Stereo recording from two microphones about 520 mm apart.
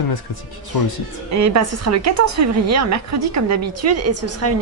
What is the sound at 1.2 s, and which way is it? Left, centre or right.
A woman's voice, right.